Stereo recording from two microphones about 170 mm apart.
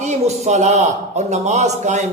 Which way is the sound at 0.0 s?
40° right (ahead or behind).